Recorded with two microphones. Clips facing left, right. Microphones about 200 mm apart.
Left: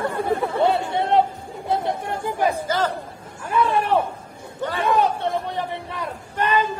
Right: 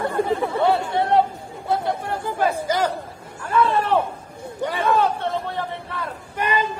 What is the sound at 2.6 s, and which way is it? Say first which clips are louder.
Chatter: right 1 dB; 15° right (ahead or behind).